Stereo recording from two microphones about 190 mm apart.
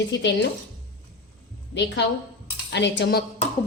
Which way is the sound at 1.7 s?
65° left (ahead or behind).